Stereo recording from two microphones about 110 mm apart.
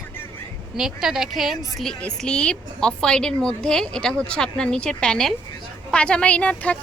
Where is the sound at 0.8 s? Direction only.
5° right (ahead or behind).